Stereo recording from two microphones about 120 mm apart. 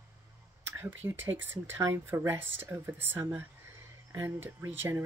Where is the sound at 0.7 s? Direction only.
20° right (ahead or behind).